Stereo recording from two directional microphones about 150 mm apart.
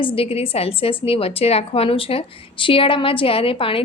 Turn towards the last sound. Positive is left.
turn(degrees=35)  # may be behind; listen again after turning